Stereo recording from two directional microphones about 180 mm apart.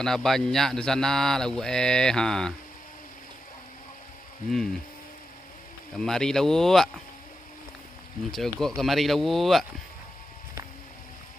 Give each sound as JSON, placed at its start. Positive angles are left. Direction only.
{"t": 0.0, "sound": "speech", "side_deg": 5}
{"t": 5.9, "sound": "speech", "side_deg": 5}
{"t": 8.3, "sound": "speech", "side_deg": 0}